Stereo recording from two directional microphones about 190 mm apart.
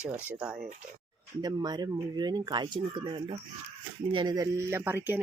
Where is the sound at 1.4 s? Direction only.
20° right (ahead or behind).